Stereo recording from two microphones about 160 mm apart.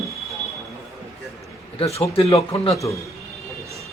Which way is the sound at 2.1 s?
35° left (ahead or behind).